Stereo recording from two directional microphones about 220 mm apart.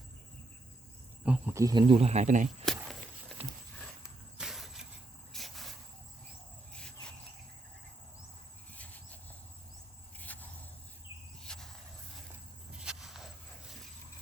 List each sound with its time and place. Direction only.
1.2 s speech: 5° right (ahead or behind); by 2.6 s 35° right (ahead or behind)
4.4 s vehicle: centre (ahead or behind)
5.3 s cricket: centre (ahead or behind)
6.7 s cricket: 5° left (ahead or behind)
8.7 s insect: 5° left (ahead or behind)
10.3 s vehicle: 5° left (ahead or behind)
11.4 s a sound: centre (ahead or behind)
12.8 s walk: 5° right (ahead or behind)